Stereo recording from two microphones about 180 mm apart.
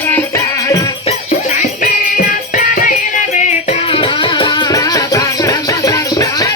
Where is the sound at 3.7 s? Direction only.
30° left (ahead or behind).